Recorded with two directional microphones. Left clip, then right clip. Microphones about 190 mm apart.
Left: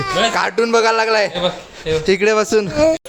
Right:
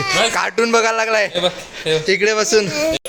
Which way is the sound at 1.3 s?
35° right (ahead or behind).